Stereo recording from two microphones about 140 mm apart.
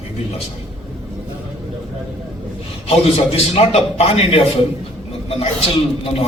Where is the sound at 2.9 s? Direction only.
45° left (ahead or behind).